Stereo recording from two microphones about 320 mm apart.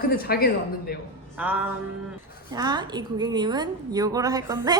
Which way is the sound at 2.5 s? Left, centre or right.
Centre.